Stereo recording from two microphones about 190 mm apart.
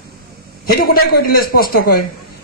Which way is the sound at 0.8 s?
55° left (ahead or behind).